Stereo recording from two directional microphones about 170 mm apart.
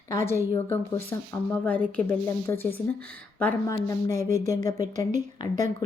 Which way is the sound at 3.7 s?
20° left (ahead or behind).